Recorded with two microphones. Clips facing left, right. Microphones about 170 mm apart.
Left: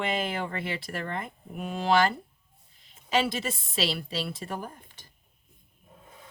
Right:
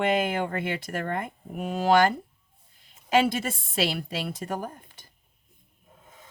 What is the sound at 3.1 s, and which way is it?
Speech, 45° right (ahead or behind).